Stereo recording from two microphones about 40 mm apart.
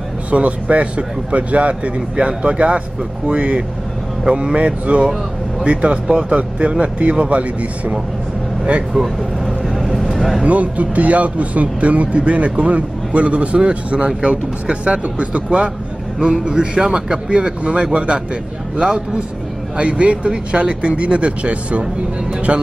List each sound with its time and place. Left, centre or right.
0.3 s speech: right
9.0 s speech: right
10.1 s a sound: centre
10.4 s speech: right